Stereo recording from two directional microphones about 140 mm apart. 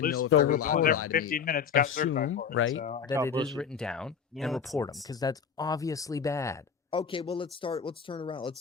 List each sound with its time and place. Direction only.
0.0 s speech: 90° left
3.5 s speech: 5° left (ahead or behind)
5.0 s speech: 25° left (ahead or behind)
6.9 s speech: 40° left (ahead or behind)